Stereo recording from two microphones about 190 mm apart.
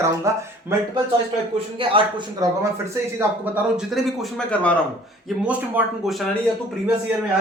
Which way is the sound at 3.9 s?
Centre (ahead or behind).